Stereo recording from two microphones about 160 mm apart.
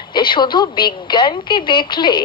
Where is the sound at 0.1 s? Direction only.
30° left (ahead or behind).